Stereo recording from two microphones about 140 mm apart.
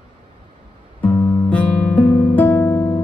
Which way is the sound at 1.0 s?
15° left (ahead or behind).